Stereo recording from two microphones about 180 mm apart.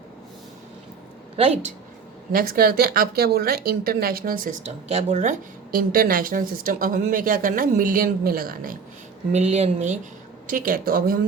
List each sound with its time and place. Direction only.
2.3 s speech: 55° right (ahead or behind)
9.3 s speech: 35° right (ahead or behind)
10.4 s speech: 50° right (ahead or behind)